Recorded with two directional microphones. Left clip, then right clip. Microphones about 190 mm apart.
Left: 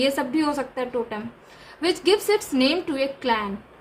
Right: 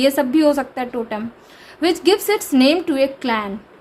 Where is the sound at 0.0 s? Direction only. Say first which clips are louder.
Right 7 dB; 35° right (ahead or behind).